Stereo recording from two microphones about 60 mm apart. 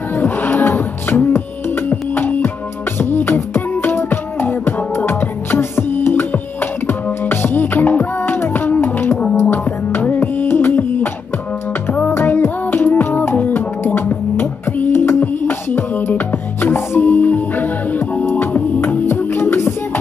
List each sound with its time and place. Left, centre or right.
0.1 s music: left
12.1 s music: left